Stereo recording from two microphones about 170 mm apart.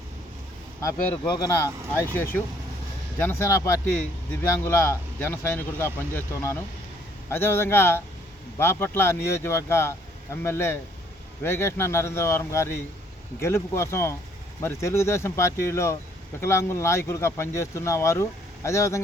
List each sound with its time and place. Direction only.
0.8 s speech: 15° left (ahead or behind)